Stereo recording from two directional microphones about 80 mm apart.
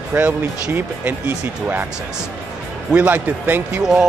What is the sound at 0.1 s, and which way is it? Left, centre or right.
Speech, right.